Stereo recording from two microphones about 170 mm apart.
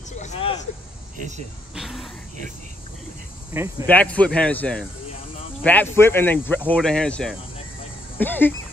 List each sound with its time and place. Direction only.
0.2 s a sound: 35° left (ahead or behind)
1.8 s speech: centre (ahead or behind)
3.8 s speech: 10° left (ahead or behind)